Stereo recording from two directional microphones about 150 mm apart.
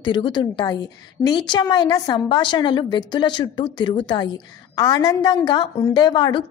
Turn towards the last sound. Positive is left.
turn(degrees=30)  # may be behind; listen again after turning